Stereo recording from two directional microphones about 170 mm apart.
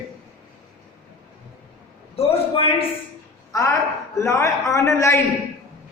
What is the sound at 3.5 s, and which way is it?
A man's voice, 20° left (ahead or behind).